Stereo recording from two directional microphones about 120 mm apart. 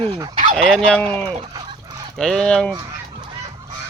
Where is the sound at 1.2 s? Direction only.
55° right (ahead or behind).